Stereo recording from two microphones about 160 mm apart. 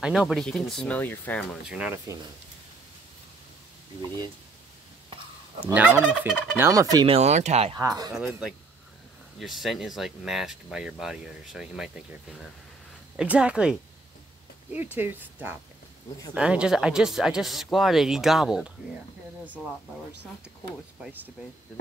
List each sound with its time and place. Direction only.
0.0 s speech: 5° right (ahead or behind)
1.7 s speech: 5° right (ahead or behind)
5.6 s speech: 10° right (ahead or behind)
6.7 s speech: 20° right (ahead or behind)
7.1 s speech: 45° right (ahead or behind)
7.7 s speech: 25° right (ahead or behind)
8.1 s speech: 5° right (ahead or behind)
21.0 s speech: 10° right (ahead or behind)